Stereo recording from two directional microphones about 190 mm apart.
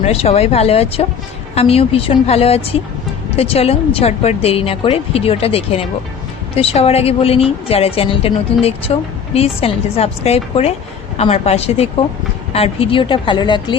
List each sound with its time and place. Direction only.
0.0 s a woman's voice: 30° left (ahead or behind)